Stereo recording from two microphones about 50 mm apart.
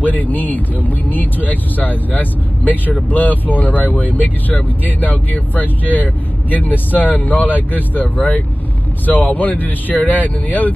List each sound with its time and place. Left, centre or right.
0.0 s speech: left